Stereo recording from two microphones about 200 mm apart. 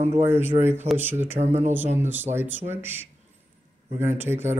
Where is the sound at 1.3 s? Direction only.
35° right (ahead or behind).